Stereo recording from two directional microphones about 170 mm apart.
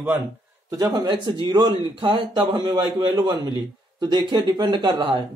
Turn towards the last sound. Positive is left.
turn(degrees=-25)  # may be behind; listen again after turning